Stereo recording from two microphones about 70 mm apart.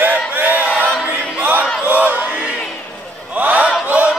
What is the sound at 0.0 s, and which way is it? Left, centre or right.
Battle cry, right.